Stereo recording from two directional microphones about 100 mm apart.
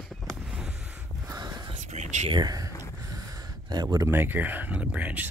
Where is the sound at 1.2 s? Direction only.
40° right (ahead or behind).